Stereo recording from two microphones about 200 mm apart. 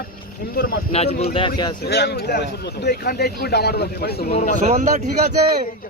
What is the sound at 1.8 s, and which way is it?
Speech, 55° left (ahead or behind).